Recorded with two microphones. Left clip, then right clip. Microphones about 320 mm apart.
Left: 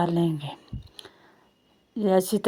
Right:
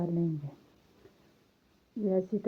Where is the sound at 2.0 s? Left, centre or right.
Centre.